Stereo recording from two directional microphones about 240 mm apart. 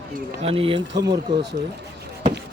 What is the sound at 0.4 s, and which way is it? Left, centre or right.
Speech, right.